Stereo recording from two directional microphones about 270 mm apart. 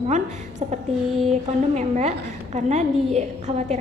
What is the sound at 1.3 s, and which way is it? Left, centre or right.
A woman's voice, right.